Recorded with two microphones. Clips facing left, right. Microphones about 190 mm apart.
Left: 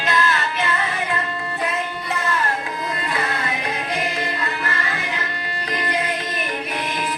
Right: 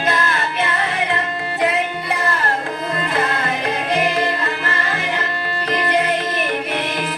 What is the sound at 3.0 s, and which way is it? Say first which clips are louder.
Music: right 5 dB; 55° right (ahead or behind).